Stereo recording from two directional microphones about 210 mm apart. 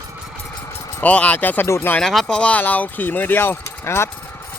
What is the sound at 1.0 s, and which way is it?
Speech, 5° left (ahead or behind).